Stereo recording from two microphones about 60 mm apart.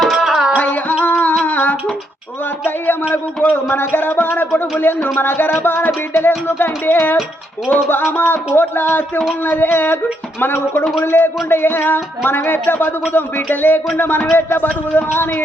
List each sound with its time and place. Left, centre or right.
0.0 s music: centre
0.5 s music: left
1.4 s humming: left
2.6 s speech: left